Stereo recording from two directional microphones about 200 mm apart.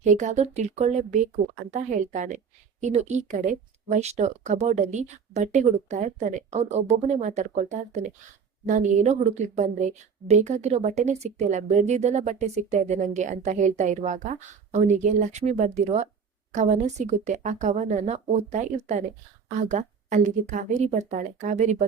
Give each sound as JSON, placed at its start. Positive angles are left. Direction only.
{"t": 0.0, "sound": "a woman's voice", "side_deg": -35}